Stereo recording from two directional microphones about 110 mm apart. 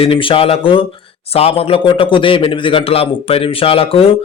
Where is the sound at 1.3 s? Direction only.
65° left (ahead or behind).